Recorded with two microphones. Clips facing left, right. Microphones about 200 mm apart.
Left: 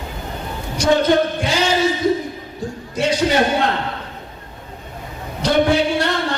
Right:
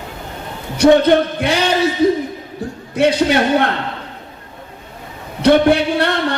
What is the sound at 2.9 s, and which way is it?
Speech, 60° right (ahead or behind).